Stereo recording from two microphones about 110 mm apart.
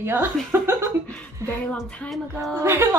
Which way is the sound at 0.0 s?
20° right (ahead or behind).